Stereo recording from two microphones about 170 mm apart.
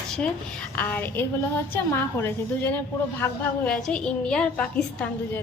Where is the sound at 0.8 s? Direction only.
10° left (ahead or behind).